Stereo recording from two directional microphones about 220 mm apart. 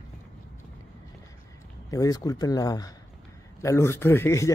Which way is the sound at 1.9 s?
15° left (ahead or behind).